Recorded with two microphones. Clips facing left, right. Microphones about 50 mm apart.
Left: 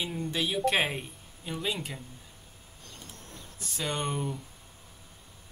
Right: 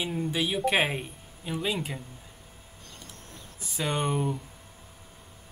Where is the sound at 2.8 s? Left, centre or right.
Centre.